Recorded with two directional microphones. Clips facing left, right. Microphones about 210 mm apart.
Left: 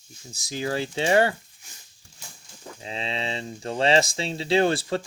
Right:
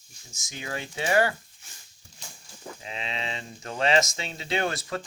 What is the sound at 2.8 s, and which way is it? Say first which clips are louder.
Speech: left 5 dB; 30° left (ahead or behind).